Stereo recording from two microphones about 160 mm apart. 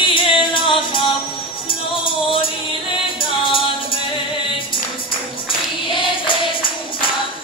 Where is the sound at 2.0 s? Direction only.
35° left (ahead or behind).